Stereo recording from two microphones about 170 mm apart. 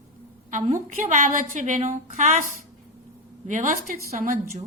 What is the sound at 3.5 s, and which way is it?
Speech, 50° right (ahead or behind).